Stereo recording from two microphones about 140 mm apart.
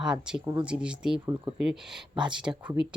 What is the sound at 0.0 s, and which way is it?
Speech, 5° right (ahead or behind).